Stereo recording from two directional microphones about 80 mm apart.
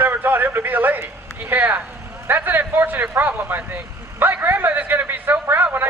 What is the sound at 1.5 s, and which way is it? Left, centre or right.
Speech, right.